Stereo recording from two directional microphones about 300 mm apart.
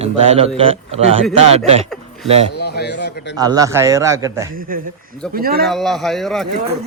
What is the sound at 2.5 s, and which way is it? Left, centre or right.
Speech, left.